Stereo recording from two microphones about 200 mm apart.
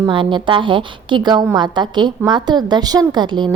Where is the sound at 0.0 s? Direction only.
25° right (ahead or behind).